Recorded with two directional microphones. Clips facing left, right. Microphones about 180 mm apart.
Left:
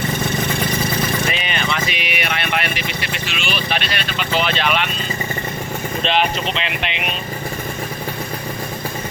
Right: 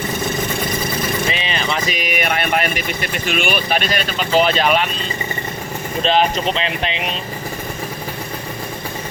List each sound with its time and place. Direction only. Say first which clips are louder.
1.5 s speech: right 1 dB; 35° right (ahead or behind)
6.0 s speech: right 4 dB; 40° right (ahead or behind)